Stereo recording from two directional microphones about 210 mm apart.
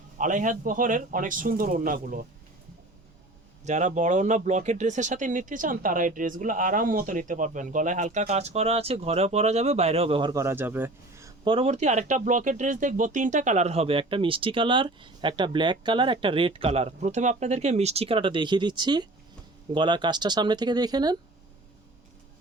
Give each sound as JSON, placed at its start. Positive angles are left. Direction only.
{"t": 0.2, "sound": "speech", "side_deg": -40}
{"t": 3.6, "sound": "speech", "side_deg": -35}